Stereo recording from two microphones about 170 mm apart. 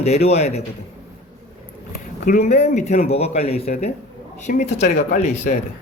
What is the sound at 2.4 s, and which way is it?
A man's voice, 40° left (ahead or behind).